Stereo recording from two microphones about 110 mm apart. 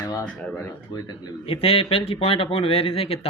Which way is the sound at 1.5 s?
60° left (ahead or behind).